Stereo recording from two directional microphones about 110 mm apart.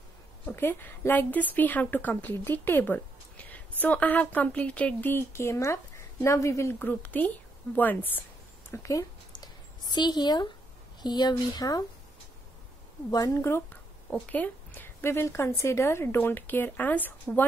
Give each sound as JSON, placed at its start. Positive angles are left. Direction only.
{"t": 0.5, "sound": "speech", "side_deg": 20}
{"t": 9.3, "sound": "a sound", "side_deg": 40}
{"t": 11.0, "sound": "speech", "side_deg": 40}
{"t": 13.1, "sound": "a woman's voice", "side_deg": 30}
{"t": 14.1, "sound": "a woman's voice", "side_deg": 15}